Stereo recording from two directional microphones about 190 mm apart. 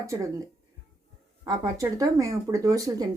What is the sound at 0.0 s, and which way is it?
Speech, 15° right (ahead or behind).